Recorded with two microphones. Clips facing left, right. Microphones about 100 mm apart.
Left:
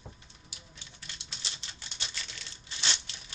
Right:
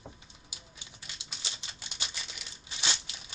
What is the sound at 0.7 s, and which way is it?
Typewriter, 15° right (ahead or behind).